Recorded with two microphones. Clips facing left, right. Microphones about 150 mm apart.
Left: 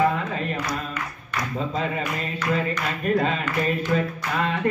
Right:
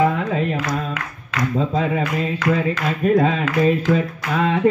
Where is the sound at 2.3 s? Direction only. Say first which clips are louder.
Right 3 dB; 90° right.